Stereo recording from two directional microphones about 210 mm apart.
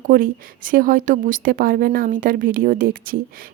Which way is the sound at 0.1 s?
40° right (ahead or behind).